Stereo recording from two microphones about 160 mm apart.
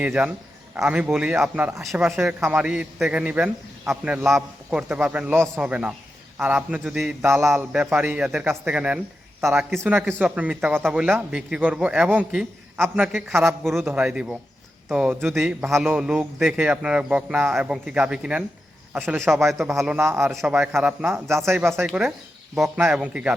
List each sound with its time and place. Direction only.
0.0 s a man's voice: 10° right (ahead or behind)
1.9 s a man's voice: 5° right (ahead or behind)
13.3 s a man's voice: 15° right (ahead or behind)
19.5 s a man's voice: centre (ahead or behind)
21.4 s a man's voice: 15° right (ahead or behind)
21.8 s a man's voice: 5° right (ahead or behind)